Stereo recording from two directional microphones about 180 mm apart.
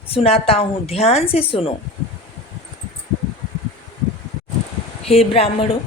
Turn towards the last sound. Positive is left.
turn(degrees=35)  # may be behind; listen again after turning